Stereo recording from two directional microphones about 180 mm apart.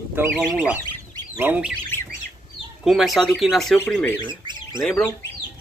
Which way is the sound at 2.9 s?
Centre (ahead or behind).